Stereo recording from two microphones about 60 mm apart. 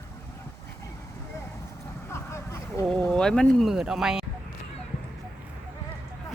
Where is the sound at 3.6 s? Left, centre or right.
Centre.